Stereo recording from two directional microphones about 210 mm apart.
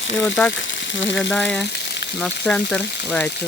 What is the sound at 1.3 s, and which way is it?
Speech, 5° left (ahead or behind).